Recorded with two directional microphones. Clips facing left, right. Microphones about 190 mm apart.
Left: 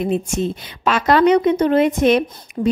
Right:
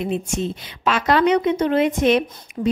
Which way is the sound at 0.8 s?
45° left (ahead or behind).